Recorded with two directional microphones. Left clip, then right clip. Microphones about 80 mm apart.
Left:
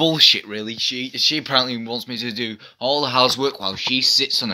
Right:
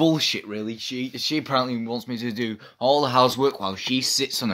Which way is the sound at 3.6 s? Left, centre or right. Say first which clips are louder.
Left 6 dB; right.